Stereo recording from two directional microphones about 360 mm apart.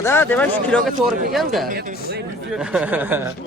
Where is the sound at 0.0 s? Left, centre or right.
Centre.